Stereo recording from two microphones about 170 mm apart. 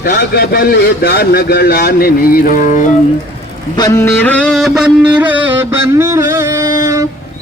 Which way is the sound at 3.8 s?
15° left (ahead or behind).